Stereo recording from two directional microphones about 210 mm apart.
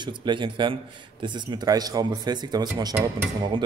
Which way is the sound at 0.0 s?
20° right (ahead or behind).